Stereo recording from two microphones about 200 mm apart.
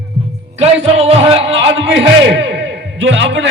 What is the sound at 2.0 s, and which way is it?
A man's voice, 65° right (ahead or behind).